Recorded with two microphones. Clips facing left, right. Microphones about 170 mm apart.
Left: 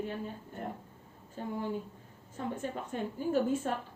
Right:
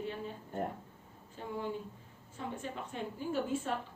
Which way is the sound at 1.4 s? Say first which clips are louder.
Left 3 dB; 45° left (ahead or behind).